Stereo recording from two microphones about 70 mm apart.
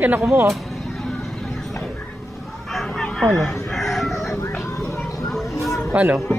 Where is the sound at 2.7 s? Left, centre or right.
Centre.